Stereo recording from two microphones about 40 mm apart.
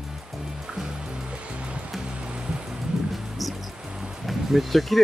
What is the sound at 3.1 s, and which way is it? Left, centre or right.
Music, centre.